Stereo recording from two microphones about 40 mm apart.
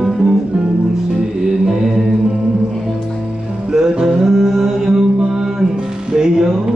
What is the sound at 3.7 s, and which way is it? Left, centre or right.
Music, centre.